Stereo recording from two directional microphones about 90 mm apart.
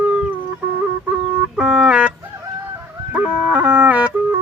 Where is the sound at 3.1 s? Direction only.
15° right (ahead or behind).